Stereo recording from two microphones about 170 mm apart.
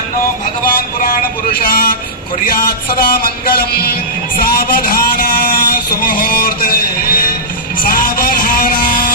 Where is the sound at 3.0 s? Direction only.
65° left (ahead or behind).